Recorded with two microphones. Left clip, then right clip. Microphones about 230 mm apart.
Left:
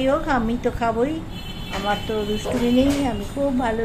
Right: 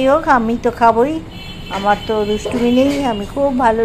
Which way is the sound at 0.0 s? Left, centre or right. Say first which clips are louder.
Right 8 dB; centre.